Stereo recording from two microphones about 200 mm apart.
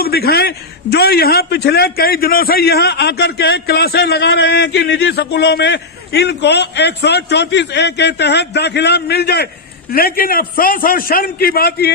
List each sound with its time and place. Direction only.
0.0 s a man's voice: 50° left (ahead or behind)